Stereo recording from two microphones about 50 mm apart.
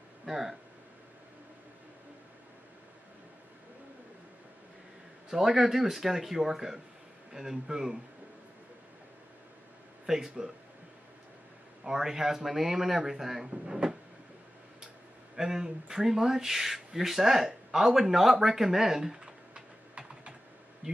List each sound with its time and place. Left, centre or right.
0.2 s speech: centre
5.3 s speech: centre
10.0 s speech: centre
11.8 s speech: centre
13.5 s speech: centre
15.3 s speech: centre
19.1 s typing: centre